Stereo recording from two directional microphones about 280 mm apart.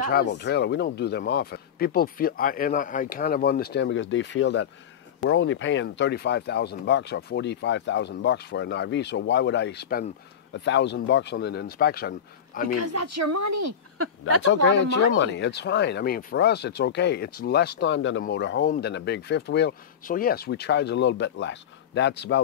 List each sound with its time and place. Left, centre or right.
0.0 s speech: left
12.7 s speech: right
14.0 s speech: right
14.4 s speech: left